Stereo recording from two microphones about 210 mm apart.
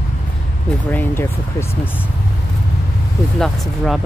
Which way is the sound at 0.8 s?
10° left (ahead or behind).